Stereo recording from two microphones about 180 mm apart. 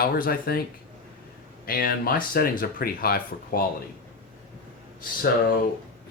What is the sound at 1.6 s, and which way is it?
Speech, 55° left (ahead or behind).